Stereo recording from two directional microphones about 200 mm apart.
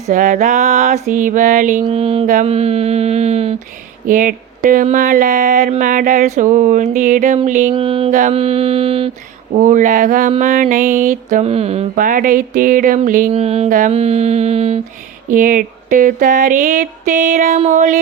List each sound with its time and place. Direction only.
0.1 s mantra: 40° right (ahead or behind)
1.8 s mantra: 30° right (ahead or behind)
4.0 s mantra: 45° right (ahead or behind)
7.7 s mantra: 25° right (ahead or behind)
9.6 s mantra: 40° right (ahead or behind)
13.3 s mantra: 30° right (ahead or behind)
15.3 s mantra: 40° right (ahead or behind)